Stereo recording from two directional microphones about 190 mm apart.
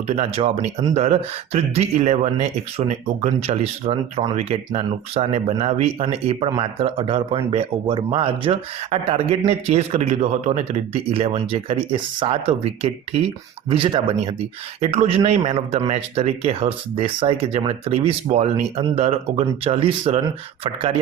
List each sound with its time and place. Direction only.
0.2 s speech: 30° right (ahead or behind)